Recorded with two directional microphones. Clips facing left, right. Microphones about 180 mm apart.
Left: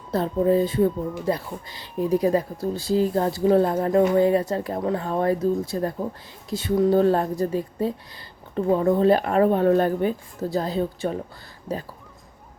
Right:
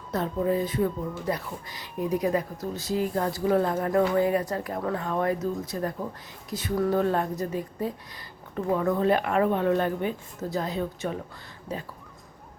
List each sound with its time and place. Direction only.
0.1 s speech: 30° left (ahead or behind)